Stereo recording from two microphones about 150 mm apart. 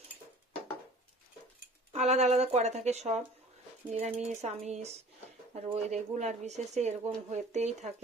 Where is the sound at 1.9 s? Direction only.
50° right (ahead or behind).